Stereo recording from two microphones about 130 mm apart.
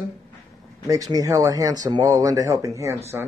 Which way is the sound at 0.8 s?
25° right (ahead or behind).